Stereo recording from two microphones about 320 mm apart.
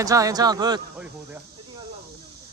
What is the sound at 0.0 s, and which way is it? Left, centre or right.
A man's voice, centre.